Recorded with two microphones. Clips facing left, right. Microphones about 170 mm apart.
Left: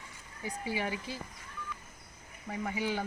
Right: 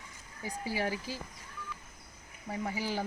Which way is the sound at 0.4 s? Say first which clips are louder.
Right 1 dB; 35° right (ahead or behind).